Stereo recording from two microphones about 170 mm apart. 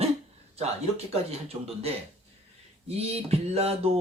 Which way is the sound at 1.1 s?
35° right (ahead or behind).